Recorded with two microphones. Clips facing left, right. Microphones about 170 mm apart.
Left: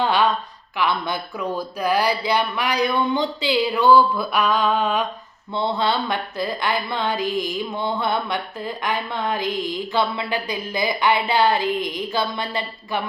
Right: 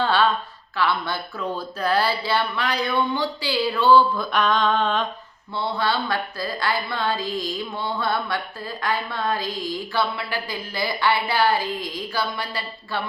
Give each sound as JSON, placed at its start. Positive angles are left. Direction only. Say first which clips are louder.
{"t": 0.0, "sound": "a sound", "louder": "left 1 dB", "side_deg": 15}
{"t": 0.8, "sound": "speech", "louder": "left 1 dB", "side_deg": 15}
{"t": 5.5, "sound": "speech", "louder": "left 3 dB", "side_deg": 20}